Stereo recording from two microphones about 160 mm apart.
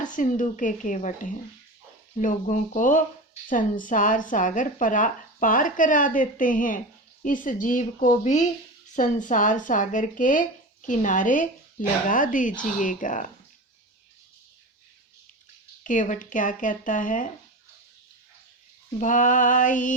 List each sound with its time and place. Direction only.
0.0 s speech: 50° left (ahead or behind)
15.8 s speech: 50° left (ahead or behind)
18.9 s speech: 55° left (ahead or behind)